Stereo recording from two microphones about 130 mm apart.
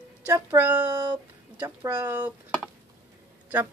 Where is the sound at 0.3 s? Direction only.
15° right (ahead or behind).